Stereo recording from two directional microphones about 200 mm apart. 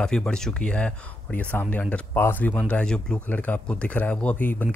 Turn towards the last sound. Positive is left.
turn(degrees=10)  # may be behind; listen again after turning